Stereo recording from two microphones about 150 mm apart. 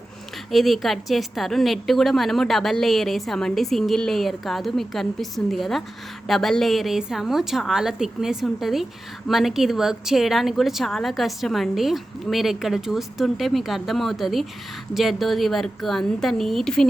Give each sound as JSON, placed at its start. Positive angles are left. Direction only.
{"t": 0.5, "sound": "a woman's voice", "side_deg": 0}